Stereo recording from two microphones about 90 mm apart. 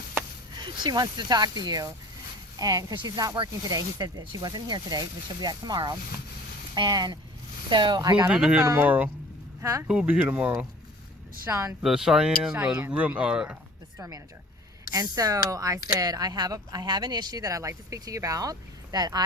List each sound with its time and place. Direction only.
0.5 s speech: 55° right (ahead or behind)
3.3 s speech: 65° right (ahead or behind)
3.7 s speech: 45° right (ahead or behind)
8.3 s speech: 10° right (ahead or behind)
9.6 s speech: 30° right (ahead or behind)
9.9 s speech: 15° right (ahead or behind)
11.8 s speech: 5° right (ahead or behind)
14.8 s speech: 45° right (ahead or behind)